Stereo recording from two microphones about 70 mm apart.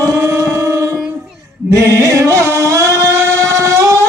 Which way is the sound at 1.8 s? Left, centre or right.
Right.